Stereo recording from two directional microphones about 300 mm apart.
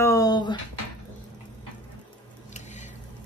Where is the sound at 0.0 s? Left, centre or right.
Centre.